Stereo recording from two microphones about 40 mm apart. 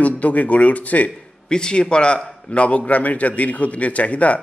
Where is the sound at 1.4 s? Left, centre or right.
Left.